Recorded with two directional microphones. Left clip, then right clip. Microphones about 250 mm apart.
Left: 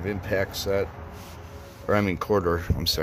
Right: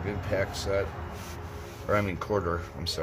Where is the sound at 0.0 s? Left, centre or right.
Left.